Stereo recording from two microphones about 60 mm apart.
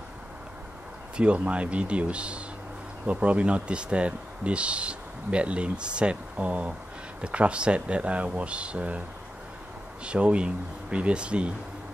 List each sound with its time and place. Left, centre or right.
1.1 s speech: centre
10.0 s speech: centre